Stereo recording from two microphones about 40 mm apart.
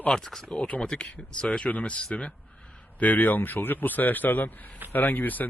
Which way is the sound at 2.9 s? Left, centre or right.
Left.